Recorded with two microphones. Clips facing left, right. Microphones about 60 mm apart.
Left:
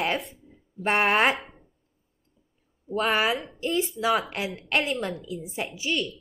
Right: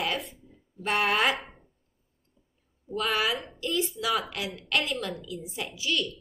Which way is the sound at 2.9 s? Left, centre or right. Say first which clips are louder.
Left 4 dB; left.